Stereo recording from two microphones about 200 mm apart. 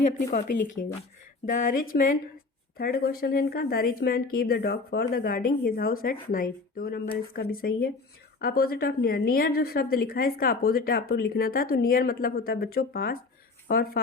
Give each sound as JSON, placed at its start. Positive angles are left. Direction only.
{"t": 0.3, "sound": "speech", "side_deg": 35}